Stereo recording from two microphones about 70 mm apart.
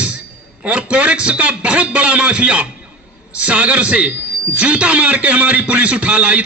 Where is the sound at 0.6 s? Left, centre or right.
Centre.